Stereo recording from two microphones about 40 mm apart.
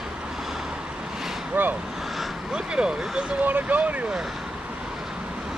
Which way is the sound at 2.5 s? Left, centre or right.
Right.